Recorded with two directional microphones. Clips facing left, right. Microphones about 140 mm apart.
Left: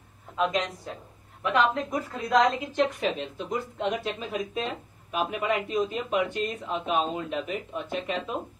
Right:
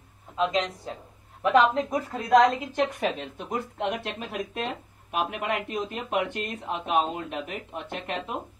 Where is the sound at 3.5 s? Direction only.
60° right (ahead or behind).